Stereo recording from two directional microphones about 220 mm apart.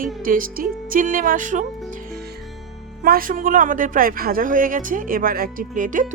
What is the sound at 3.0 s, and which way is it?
Speech, 40° right (ahead or behind).